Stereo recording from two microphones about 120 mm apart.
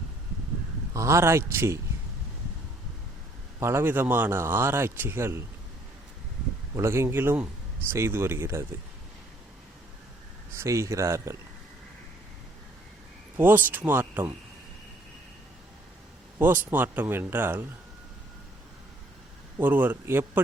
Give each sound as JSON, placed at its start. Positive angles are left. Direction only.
{"t": 0.9, "sound": "speech", "side_deg": -25}
{"t": 3.6, "sound": "speech", "side_deg": -20}
{"t": 6.7, "sound": "speech", "side_deg": -20}
{"t": 10.5, "sound": "speech", "side_deg": -25}
{"t": 13.3, "sound": "speech", "side_deg": -15}
{"t": 16.4, "sound": "speech", "side_deg": -15}
{"t": 19.5, "sound": "speech", "side_deg": -15}